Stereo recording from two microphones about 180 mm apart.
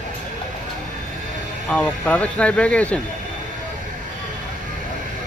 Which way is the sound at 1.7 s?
5° left (ahead or behind).